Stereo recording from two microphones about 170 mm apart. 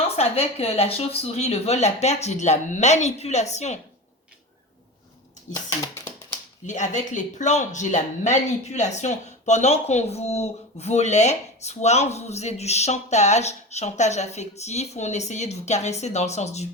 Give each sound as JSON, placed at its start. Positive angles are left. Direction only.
{"t": 0.2, "sound": "speech", "side_deg": 35}
{"t": 5.6, "sound": "speech", "side_deg": 20}
{"t": 6.7, "sound": "speech", "side_deg": 45}